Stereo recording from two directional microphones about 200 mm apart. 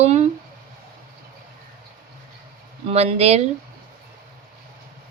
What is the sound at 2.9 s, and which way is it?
Speech, 30° right (ahead or behind).